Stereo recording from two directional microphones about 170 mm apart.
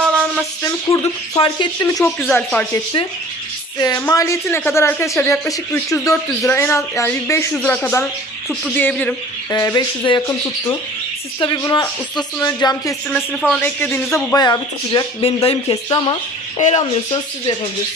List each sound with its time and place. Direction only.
0.0 s a sound: 5° left (ahead or behind)
0.6 s speech: 15° left (ahead or behind)
1.4 s speech: 30° left (ahead or behind)
2.0 s speech: 5° left (ahead or behind)
3.8 s speech: 20° left (ahead or behind)
9.5 s speech: 20° left (ahead or behind)
11.3 s speech: 25° left (ahead or behind)
13.1 s speech: centre (ahead or behind)
13.6 s speech: 10° left (ahead or behind)
14.3 s speech: 25° left (ahead or behind)